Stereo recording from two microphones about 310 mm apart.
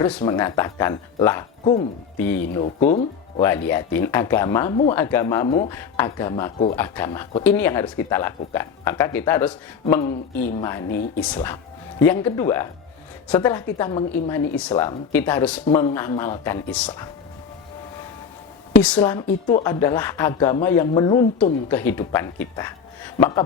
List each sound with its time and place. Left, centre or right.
0.0 s speech: centre
2.6 s speech: left
3.4 s speech: centre
18.8 s speech: centre
19.0 s speech: centre